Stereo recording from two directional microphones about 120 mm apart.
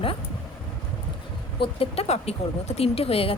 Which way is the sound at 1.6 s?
55° left (ahead or behind).